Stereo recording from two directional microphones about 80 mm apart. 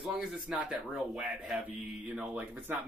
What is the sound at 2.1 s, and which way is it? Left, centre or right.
Speech, centre.